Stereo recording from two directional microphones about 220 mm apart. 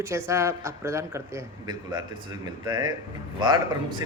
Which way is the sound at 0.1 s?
15° right (ahead or behind).